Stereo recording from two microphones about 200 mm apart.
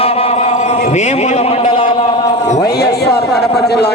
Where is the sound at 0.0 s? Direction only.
30° left (ahead or behind).